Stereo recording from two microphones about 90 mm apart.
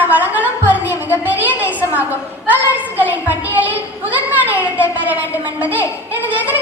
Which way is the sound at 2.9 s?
20° right (ahead or behind).